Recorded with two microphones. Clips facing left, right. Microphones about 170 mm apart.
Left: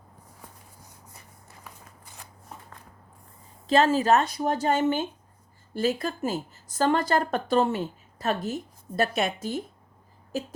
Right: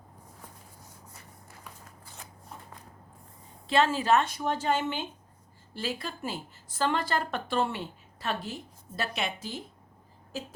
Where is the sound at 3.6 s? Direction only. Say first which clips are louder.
Left 4 dB; 40° left (ahead or behind).